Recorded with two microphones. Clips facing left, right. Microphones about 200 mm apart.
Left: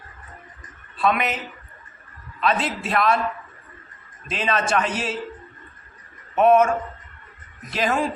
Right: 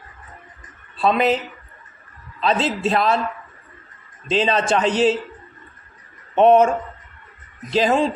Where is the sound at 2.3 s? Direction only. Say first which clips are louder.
Right 3 dB; 30° right (ahead or behind).